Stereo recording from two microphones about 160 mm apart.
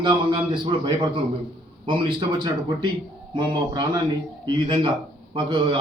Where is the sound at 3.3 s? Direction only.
30° right (ahead or behind).